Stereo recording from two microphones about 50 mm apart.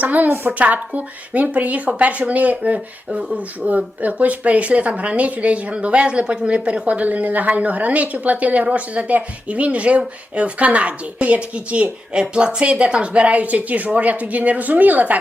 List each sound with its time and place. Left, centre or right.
0.0 s a woman's voice: right